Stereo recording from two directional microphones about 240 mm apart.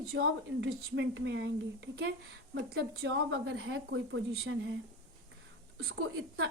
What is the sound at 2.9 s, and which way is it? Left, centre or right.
A woman's voice, right.